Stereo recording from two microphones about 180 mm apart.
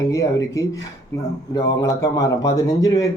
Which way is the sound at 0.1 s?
15° left (ahead or behind).